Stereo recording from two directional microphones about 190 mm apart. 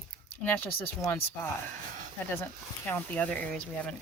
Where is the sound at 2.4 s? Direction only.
10° left (ahead or behind).